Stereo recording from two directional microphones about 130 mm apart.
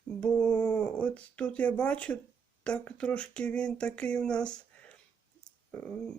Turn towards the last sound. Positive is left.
turn(degrees=10)  # may be behind; listen again after turning